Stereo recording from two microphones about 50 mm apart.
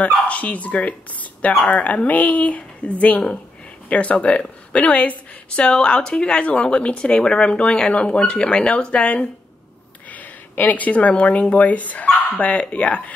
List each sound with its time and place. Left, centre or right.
0.0 s a woman's voice: left